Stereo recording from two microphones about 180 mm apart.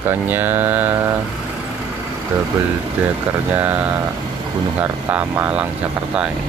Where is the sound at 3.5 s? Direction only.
10° right (ahead or behind).